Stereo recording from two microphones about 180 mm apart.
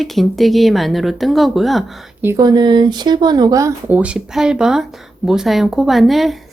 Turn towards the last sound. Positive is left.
turn(degrees=0)  # may be behind; listen again after turning